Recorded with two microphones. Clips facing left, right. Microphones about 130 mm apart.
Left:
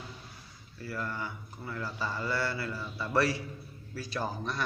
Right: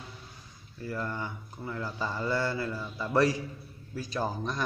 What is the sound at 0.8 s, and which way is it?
Speech, 20° right (ahead or behind).